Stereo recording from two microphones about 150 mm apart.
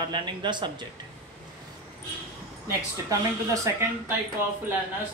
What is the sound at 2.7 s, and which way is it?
Speech, 20° right (ahead or behind).